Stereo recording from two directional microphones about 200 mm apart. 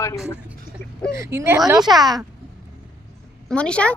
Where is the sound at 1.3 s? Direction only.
10° right (ahead or behind).